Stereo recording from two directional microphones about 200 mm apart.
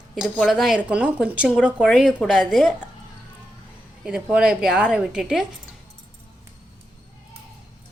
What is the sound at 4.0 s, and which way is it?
Speech, 5° right (ahead or behind).